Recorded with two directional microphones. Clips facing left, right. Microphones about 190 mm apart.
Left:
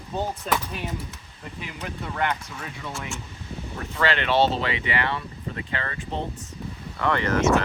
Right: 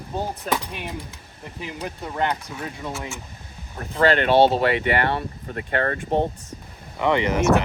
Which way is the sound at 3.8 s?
40° right (ahead or behind).